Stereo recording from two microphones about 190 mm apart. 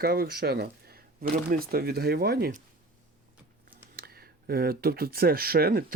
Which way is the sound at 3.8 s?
55° right (ahead or behind).